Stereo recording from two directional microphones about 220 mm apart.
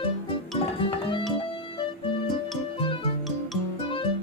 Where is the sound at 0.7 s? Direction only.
20° left (ahead or behind).